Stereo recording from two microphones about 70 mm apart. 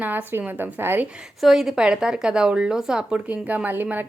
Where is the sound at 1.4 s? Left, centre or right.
Centre.